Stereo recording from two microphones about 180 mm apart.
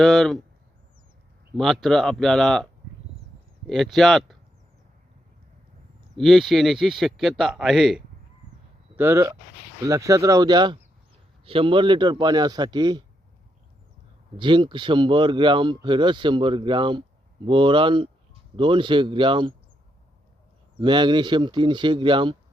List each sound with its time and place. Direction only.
0.0 s speech: centre (ahead or behind)
1.5 s speech: centre (ahead or behind)
3.7 s speech: centre (ahead or behind)
6.1 s speech: centre (ahead or behind)
9.0 s speech: 15° right (ahead or behind)
14.3 s speech: 25° right (ahead or behind)
20.8 s speech: 25° right (ahead or behind)